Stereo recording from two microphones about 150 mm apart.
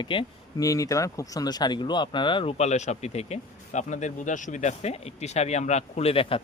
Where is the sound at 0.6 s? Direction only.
20° left (ahead or behind).